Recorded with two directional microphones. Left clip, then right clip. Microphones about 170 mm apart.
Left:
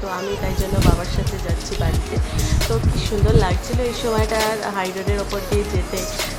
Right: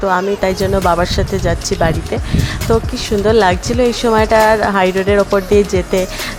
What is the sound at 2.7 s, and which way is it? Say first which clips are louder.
A woman's voice: right 12 dB; 40° right (ahead or behind).